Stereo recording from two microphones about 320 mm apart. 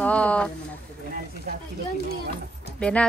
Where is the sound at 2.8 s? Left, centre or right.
Centre.